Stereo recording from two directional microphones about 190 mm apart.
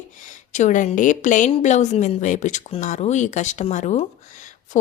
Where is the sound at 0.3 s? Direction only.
40° left (ahead or behind).